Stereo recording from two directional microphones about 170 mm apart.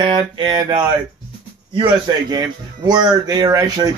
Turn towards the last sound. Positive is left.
turn(degrees=-25)  # may be behind; listen again after turning